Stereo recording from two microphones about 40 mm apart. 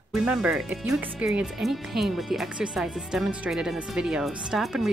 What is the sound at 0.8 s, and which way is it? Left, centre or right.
Speech, right.